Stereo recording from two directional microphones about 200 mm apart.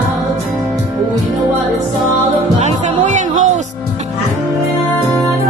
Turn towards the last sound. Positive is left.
turn(degrees=-40)  # may be behind; listen again after turning